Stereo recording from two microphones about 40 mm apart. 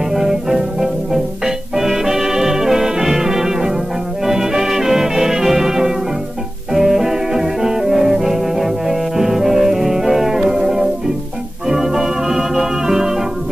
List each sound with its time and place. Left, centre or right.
0.1 s music: centre
11.7 s organ: centre